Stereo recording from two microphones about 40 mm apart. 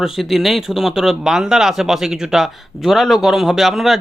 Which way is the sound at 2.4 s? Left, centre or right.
Centre.